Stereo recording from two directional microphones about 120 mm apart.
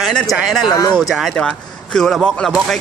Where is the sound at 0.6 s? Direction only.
35° left (ahead or behind).